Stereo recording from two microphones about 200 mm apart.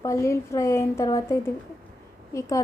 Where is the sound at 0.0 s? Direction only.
15° left (ahead or behind).